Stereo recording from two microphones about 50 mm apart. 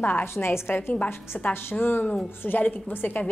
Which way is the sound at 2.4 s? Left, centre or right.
Left.